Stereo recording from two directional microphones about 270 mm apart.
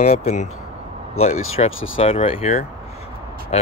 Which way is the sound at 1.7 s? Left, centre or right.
Left.